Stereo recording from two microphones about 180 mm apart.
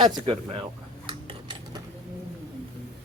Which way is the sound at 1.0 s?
30° right (ahead or behind).